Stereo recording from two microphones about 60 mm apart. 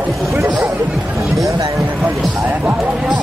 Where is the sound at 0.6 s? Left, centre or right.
Right.